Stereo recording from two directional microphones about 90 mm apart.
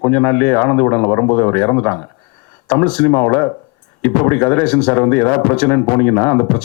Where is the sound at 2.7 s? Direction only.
10° left (ahead or behind).